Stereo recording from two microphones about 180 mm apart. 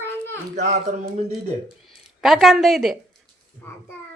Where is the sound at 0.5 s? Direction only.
40° right (ahead or behind).